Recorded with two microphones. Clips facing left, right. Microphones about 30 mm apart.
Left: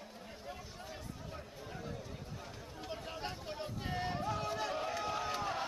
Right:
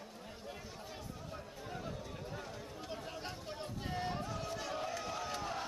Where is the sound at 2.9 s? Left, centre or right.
Centre.